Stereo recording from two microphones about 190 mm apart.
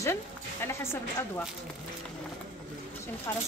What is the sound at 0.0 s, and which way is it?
Speech, 15° left (ahead or behind).